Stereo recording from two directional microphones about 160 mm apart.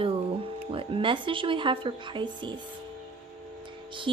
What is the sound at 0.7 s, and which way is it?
Speech, 35° right (ahead or behind).